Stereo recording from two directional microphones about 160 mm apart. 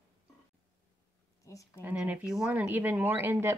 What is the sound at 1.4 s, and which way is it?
Speech, 20° left (ahead or behind).